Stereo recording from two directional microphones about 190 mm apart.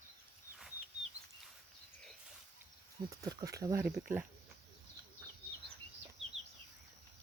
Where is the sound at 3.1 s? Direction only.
20° right (ahead or behind).